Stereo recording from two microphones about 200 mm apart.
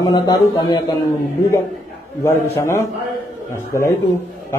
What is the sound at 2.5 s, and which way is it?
Speech, 15° left (ahead or behind).